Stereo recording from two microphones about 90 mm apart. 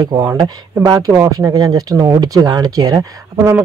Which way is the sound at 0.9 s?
45° right (ahead or behind).